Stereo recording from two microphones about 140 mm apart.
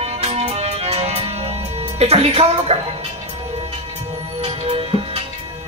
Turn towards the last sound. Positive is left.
turn(degrees=-45)  # may be behind; listen again after turning